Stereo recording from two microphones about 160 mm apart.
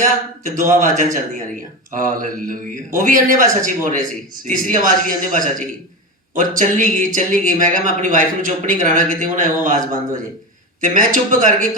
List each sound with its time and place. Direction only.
0.0 s speech: 50° right (ahead or behind)
2.5 s a man's voice: 55° right (ahead or behind)